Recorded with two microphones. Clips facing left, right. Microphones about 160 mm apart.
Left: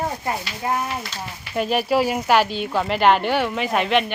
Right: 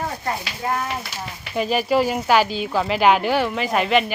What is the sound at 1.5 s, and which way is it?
Speech, centre (ahead or behind).